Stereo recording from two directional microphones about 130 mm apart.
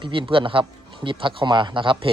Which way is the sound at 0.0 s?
40° right (ahead or behind).